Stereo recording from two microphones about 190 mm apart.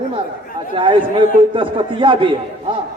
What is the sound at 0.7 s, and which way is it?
A man's voice, 25° right (ahead or behind).